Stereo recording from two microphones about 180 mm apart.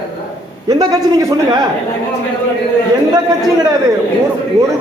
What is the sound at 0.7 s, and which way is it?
Speech, 20° right (ahead or behind).